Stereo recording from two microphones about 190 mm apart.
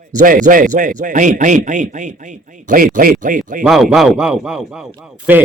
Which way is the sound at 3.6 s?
Centre (ahead or behind).